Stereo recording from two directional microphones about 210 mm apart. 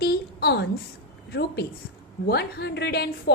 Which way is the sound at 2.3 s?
50° left (ahead or behind).